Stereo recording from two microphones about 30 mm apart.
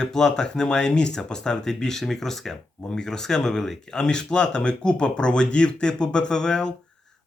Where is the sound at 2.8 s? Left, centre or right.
Left.